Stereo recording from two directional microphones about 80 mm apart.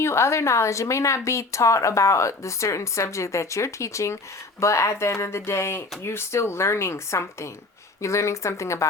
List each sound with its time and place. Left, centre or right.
0.0 s a woman's voice: left